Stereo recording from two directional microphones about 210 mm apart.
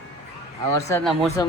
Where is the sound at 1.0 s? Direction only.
Centre (ahead or behind).